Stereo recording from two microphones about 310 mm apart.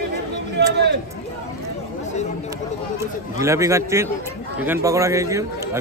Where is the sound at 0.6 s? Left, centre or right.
Right.